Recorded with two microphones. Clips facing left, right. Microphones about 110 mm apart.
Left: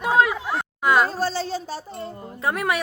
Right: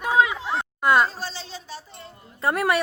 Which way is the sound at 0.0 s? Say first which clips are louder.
Left 1 dB; 15° left (ahead or behind).